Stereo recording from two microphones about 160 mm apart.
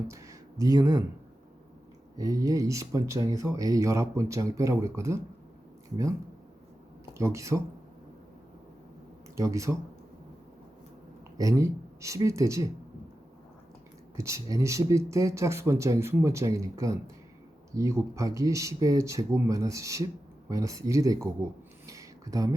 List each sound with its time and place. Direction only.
0.1 s a sound: 20° right (ahead or behind)
0.6 s speech: 25° right (ahead or behind)
2.1 s speech: 20° right (ahead or behind)
7.1 s speech: 20° right (ahead or behind)
9.3 s speech: 20° right (ahead or behind)
11.3 s speech: 20° right (ahead or behind)
14.2 s speech: 20° right (ahead or behind)
21.8 s a sound: 20° right (ahead or behind)